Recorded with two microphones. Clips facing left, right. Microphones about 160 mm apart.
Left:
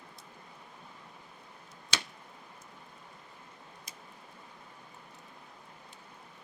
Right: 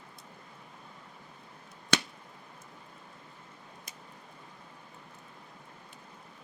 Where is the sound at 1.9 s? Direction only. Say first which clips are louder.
Right 8 dB; 55° right (ahead or behind).